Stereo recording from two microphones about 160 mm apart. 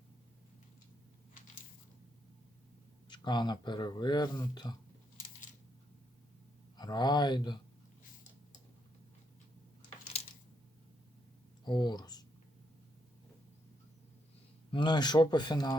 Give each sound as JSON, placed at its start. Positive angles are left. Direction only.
{"t": 3.1, "sound": "speech", "side_deg": 30}
{"t": 6.7, "sound": "speech", "side_deg": 25}
{"t": 11.6, "sound": "speech", "side_deg": 25}
{"t": 14.7, "sound": "speech", "side_deg": 30}